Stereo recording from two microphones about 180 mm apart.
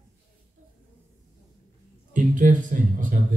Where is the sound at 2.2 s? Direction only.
45° right (ahead or behind).